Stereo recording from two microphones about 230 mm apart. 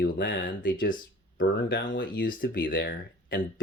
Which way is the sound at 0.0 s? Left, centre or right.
Left.